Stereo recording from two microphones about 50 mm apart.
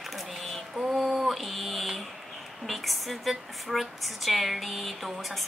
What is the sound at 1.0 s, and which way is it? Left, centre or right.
Mantra, centre.